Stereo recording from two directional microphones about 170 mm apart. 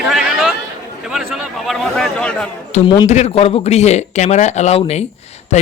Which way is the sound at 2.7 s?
45° left (ahead or behind).